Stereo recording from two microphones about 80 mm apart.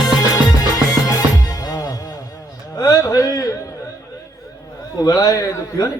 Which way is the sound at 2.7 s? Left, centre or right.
Left.